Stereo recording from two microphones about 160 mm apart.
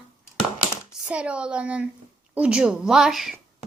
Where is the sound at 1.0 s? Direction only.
5° right (ahead or behind).